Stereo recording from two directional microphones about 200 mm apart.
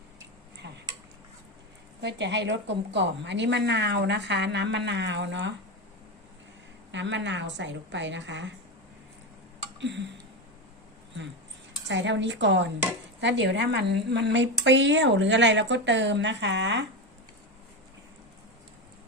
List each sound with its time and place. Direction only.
2.0 s a woman's voice: 60° right (ahead or behind)
6.9 s a woman's voice: 65° right (ahead or behind)
9.8 s a woman's voice: 60° right (ahead or behind)
11.9 s a woman's voice: 65° right (ahead or behind)